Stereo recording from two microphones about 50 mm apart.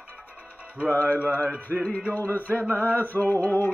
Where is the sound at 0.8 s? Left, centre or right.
Left.